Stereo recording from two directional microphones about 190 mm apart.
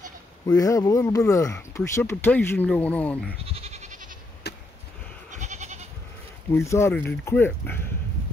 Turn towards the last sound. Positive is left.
turn(degrees=10)  # may be behind; listen again after turning